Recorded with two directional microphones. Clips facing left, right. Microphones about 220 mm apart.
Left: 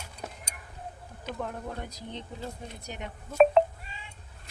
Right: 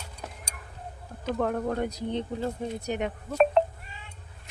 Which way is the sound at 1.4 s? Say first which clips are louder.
Right 10 dB; 70° right (ahead or behind).